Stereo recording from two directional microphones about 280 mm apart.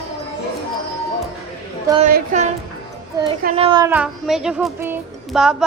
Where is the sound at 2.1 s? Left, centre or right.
Right.